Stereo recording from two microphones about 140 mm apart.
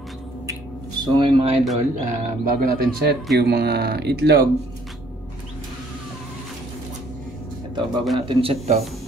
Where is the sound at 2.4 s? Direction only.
90° right.